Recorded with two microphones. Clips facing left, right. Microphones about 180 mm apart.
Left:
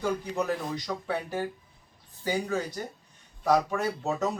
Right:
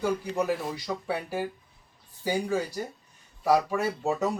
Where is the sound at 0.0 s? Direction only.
10° right (ahead or behind).